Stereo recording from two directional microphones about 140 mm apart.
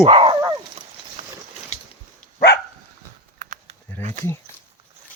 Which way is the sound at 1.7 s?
50° left (ahead or behind).